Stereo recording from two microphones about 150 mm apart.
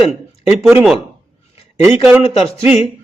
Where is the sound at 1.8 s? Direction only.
15° right (ahead or behind).